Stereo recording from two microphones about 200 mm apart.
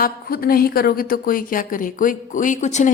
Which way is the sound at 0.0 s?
45° left (ahead or behind).